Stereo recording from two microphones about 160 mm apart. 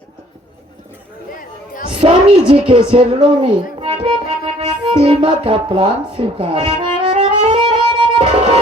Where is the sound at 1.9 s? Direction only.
30° right (ahead or behind).